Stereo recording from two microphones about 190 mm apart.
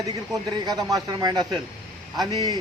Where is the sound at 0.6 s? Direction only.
20° right (ahead or behind).